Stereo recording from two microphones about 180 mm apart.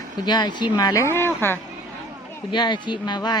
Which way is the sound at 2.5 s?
25° left (ahead or behind).